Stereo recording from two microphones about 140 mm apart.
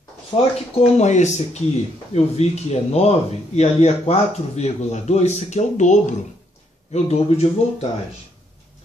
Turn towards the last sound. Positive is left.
turn(degrees=50)  # may be behind; listen again after turning